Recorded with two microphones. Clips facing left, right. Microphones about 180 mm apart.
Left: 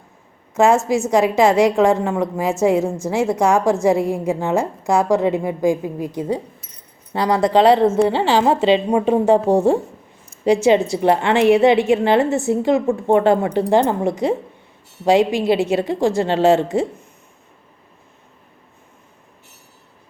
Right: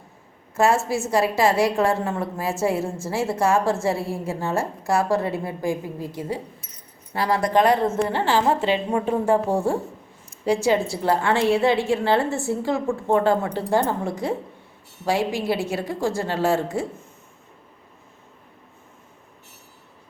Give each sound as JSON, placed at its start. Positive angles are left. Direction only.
{"t": 0.5, "sound": "a woman's voice", "side_deg": 20}
{"t": 7.5, "sound": "a woman's voice", "side_deg": 90}
{"t": 8.4, "sound": "a woman's voice", "side_deg": 20}
{"t": 10.4, "sound": "a woman's voice", "side_deg": 20}